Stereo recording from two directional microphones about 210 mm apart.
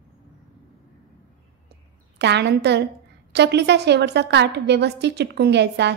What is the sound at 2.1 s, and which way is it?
A woman's voice, 55° right (ahead or behind).